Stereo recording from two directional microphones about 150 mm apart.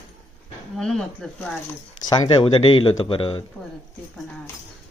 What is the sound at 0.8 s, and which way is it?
Speech, 5° left (ahead or behind).